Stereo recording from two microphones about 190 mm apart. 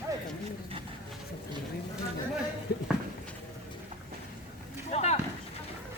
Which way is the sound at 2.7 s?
55° left (ahead or behind).